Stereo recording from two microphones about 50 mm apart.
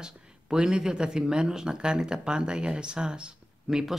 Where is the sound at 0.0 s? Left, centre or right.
Centre.